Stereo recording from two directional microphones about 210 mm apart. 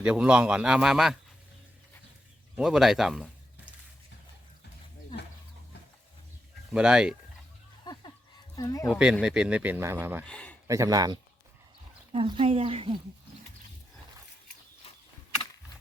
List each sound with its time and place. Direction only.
0.0 s speech: 5° right (ahead or behind)
2.6 s speech: centre (ahead or behind)
6.7 s speech: 5° right (ahead or behind)
8.5 s speech: 15° left (ahead or behind)
8.9 s speech: 5° right (ahead or behind)
10.2 s speech: 5° left (ahead or behind)
10.7 s speech: 15° right (ahead or behind)
14.8 s a sound: 30° left (ahead or behind)